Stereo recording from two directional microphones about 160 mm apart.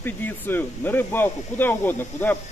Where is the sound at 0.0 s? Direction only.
10° left (ahead or behind).